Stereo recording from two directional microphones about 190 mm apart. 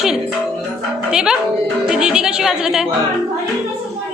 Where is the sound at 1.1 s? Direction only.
5° right (ahead or behind).